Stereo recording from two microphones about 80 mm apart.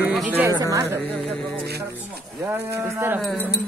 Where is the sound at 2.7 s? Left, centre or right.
Right.